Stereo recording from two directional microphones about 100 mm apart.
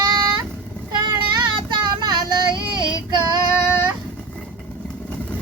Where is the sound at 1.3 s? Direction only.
50° right (ahead or behind).